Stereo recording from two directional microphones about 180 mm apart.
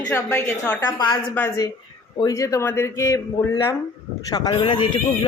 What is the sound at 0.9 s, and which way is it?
Speech, 25° left (ahead or behind).